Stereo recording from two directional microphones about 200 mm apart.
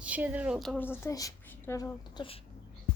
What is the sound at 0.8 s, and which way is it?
A woman's voice, 10° left (ahead or behind).